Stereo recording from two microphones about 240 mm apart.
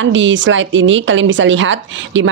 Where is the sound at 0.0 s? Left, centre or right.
Right.